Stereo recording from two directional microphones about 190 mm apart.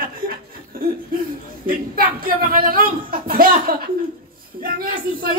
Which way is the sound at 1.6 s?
50° right (ahead or behind).